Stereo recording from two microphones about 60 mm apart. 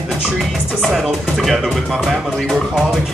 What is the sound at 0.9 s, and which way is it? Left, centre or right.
Speech, centre.